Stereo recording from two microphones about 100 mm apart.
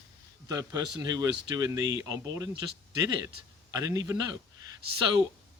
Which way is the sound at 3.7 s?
35° right (ahead or behind).